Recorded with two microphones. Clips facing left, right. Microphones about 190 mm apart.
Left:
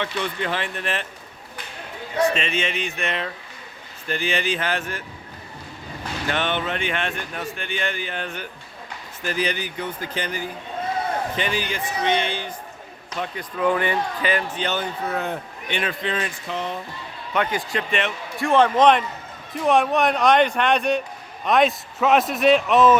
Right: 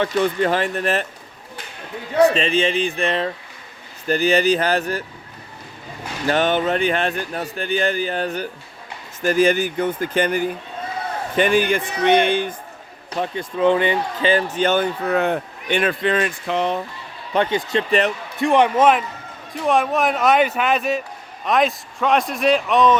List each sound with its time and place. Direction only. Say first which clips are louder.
0.0 s speech: right 8 dB; 40° right (ahead or behind)
2.2 s speech: right 6 dB; 35° right (ahead or behind)
6.2 s speech: right 7 dB; 40° right (ahead or behind)
13.1 s speech: right 5 dB; 30° right (ahead or behind)
14.5 s speech: right 7 dB; 50° right (ahead or behind); by 16.8 s 70° right (ahead or behind)
17.3 s a man's voice: right 5 dB; 25° right (ahead or behind); by 23.0 s 5° left (ahead or behind)